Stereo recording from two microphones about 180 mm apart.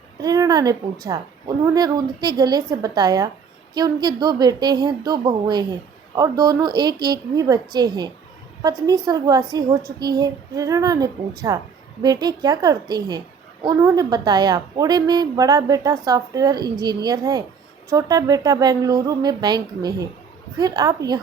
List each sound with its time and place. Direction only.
0.2 s a child's voice: 20° right (ahead or behind)